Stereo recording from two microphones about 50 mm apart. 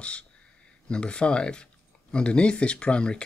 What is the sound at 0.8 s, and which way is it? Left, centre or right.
Speech, centre.